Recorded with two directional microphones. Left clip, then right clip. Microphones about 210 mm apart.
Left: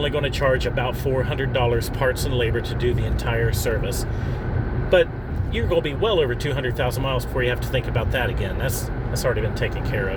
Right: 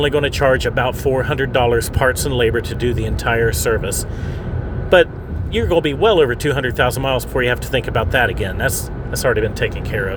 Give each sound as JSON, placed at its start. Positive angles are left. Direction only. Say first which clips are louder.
{"t": 0.0, "sound": "speech", "louder": "right 6 dB", "side_deg": -40}